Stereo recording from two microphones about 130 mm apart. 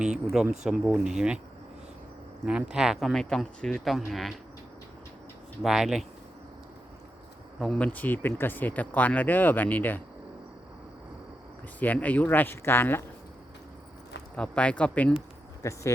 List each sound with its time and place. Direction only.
0.6 s speech: 5° right (ahead or behind)
2.5 s speech: 5° right (ahead or behind)
5.6 s speech: 5° right (ahead or behind)
7.6 s speech: 5° left (ahead or behind)
11.8 s speech: 10° left (ahead or behind)
14.3 s speech: 10° left (ahead or behind)
15.6 s speech: 25° left (ahead or behind)